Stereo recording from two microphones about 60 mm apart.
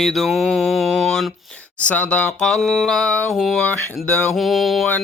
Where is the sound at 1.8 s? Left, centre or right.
Left.